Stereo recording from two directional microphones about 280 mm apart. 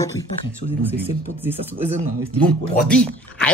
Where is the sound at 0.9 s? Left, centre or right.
Centre.